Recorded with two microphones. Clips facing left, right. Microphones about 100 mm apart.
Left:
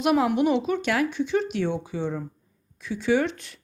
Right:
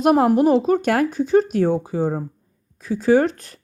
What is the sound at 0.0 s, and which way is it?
A woman's voice, 40° right (ahead or behind).